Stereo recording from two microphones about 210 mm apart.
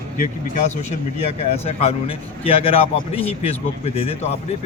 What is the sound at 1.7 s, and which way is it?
Speech, 30° left (ahead or behind).